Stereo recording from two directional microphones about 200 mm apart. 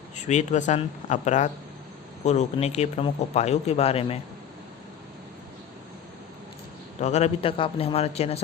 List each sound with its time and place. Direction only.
0.3 s speech: 35° left (ahead or behind)
7.0 s speech: 35° left (ahead or behind)